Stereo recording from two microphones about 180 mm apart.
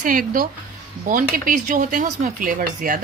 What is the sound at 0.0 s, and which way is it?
Speech, 50° right (ahead or behind).